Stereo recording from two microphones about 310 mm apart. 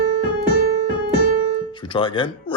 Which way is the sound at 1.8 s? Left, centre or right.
Centre.